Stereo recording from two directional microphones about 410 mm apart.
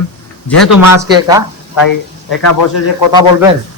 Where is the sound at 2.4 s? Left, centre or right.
Left.